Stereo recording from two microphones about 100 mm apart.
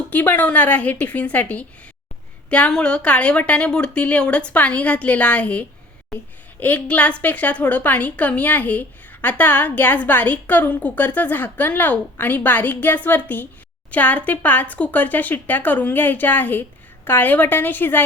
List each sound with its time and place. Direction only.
0.1 s a woman's voice: 15° left (ahead or behind)